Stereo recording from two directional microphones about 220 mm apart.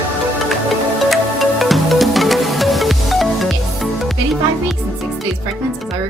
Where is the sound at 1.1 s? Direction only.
Centre (ahead or behind).